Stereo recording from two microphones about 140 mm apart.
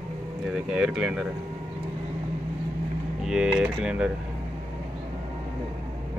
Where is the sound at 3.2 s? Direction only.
5° right (ahead or behind).